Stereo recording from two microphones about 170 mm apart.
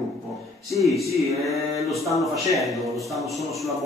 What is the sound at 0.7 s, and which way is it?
Speech, centre (ahead or behind).